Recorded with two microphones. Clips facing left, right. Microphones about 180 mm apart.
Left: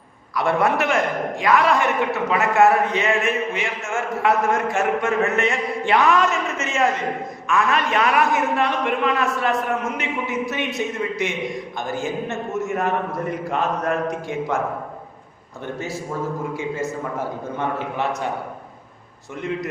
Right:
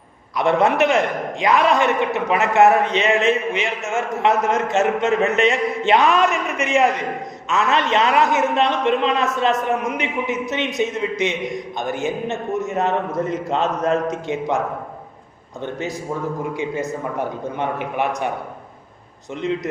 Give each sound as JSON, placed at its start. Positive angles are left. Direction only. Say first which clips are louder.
{"t": 0.3, "sound": "a man's voice", "louder": "right 3 dB", "side_deg": -20}
{"t": 15.6, "sound": "a man's voice", "louder": "right 2 dB", "side_deg": -20}
{"t": 19.4, "sound": "a man's voice", "louder": "right 4 dB", "side_deg": -20}